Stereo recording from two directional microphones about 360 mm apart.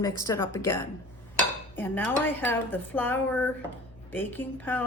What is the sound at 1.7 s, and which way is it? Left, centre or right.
A woman's voice, centre.